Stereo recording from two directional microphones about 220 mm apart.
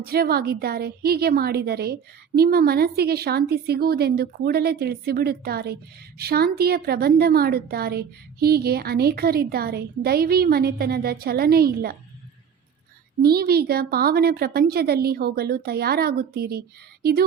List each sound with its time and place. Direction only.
0.0 s a woman's voice: 45° right (ahead or behind)
13.2 s a woman's voice: 45° right (ahead or behind)